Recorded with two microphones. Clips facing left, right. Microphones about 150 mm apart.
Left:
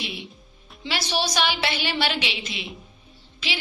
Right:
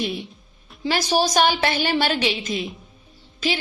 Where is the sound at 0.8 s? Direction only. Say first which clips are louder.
Right 6 dB; 45° right (ahead or behind).